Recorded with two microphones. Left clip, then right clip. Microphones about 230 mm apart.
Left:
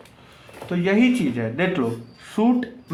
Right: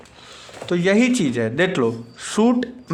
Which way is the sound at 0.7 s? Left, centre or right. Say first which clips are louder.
Right 2 dB; right.